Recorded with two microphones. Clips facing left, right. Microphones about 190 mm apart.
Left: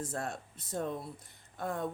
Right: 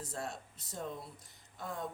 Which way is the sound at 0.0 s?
50° left (ahead or behind).